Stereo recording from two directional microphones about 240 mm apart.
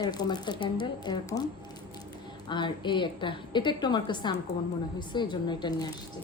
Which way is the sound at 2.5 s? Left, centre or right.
Centre.